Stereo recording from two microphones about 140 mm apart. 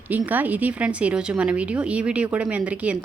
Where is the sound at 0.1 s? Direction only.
10° right (ahead or behind).